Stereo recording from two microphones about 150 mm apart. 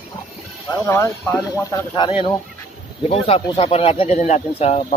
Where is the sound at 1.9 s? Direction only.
35° left (ahead or behind).